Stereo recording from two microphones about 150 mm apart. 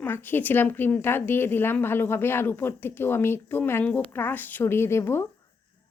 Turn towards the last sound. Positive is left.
turn(degrees=15)  # may be behind; listen again after turning